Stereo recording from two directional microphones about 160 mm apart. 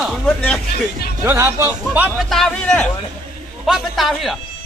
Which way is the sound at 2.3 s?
5° left (ahead or behind).